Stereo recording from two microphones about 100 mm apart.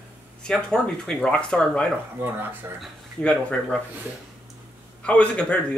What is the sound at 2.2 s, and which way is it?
Speech, 20° right (ahead or behind).